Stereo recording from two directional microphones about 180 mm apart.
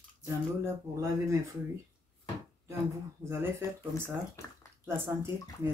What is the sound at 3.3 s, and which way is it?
Speech, 15° right (ahead or behind).